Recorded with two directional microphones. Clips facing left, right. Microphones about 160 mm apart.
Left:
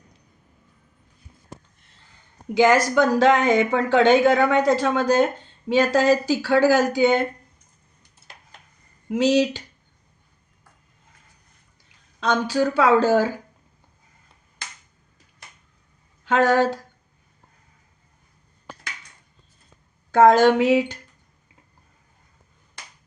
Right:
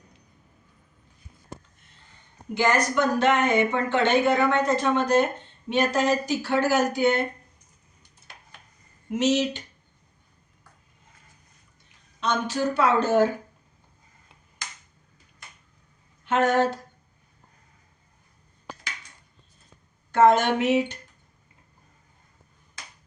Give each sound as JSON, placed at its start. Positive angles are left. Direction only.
{"t": 2.6, "sound": "speech", "side_deg": 90}
{"t": 9.1, "sound": "speech", "side_deg": 90}
{"t": 12.2, "sound": "speech", "side_deg": 90}
{"t": 16.2, "sound": "speech", "side_deg": 90}
{"t": 20.1, "sound": "speech", "side_deg": 90}